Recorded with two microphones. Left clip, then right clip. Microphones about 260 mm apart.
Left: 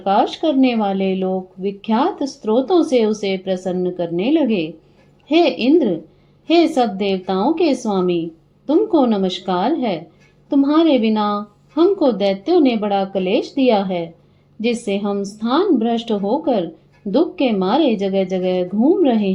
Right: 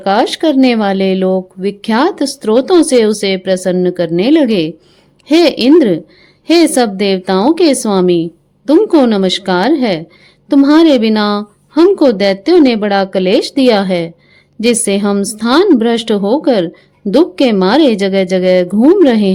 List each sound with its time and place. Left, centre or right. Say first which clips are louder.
0.0 s speech: right 5 dB; right